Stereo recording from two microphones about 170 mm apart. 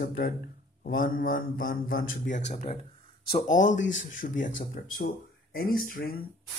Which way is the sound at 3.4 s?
45° left (ahead or behind).